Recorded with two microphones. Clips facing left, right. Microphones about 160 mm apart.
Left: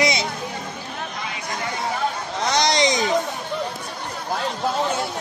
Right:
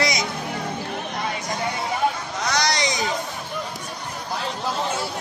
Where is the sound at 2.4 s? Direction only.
20° left (ahead or behind).